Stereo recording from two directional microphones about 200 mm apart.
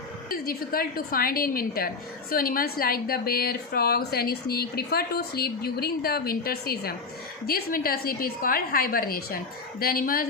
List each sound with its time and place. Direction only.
0.3 s a woman's voice: 45° left (ahead or behind)